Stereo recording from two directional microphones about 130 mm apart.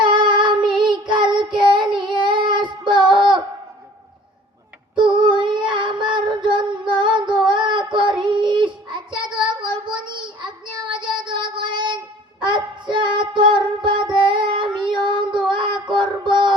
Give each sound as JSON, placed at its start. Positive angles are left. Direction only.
{"t": 0.0, "sound": "child singing", "side_deg": -35}
{"t": 4.9, "sound": "child singing", "side_deg": -40}
{"t": 10.9, "sound": "child singing", "side_deg": -40}